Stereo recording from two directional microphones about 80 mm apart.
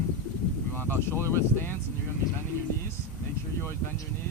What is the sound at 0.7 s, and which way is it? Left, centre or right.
Speech, left.